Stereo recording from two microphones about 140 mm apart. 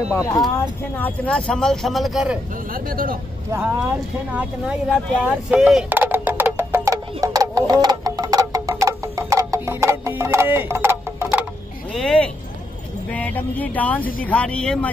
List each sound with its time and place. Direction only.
0.1 s speech: 25° left (ahead or behind)
0.6 s speech: 10° left (ahead or behind)
2.7 s speech: 90° right
4.3 s speech: 5° right (ahead or behind)
5.9 s music: 15° right (ahead or behind)
11.9 s speech: 5° left (ahead or behind)